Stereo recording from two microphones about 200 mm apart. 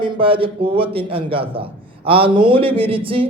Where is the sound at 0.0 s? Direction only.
25° right (ahead or behind).